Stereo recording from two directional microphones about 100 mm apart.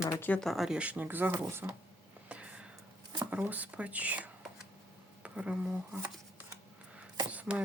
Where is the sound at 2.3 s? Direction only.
10° right (ahead or behind).